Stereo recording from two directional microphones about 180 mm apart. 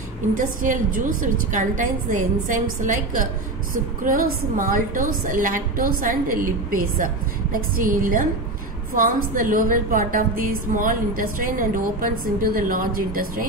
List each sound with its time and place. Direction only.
0.4 s a woman's voice: 50° right (ahead or behind)